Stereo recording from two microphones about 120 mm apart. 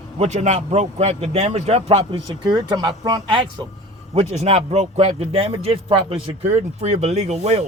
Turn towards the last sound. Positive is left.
turn(degrees=-60)  # may be behind; listen again after turning